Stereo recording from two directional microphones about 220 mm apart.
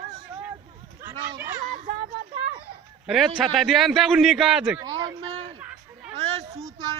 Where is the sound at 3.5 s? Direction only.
Centre (ahead or behind).